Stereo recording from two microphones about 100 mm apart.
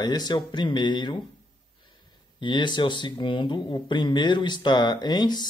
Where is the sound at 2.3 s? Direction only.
55° left (ahead or behind).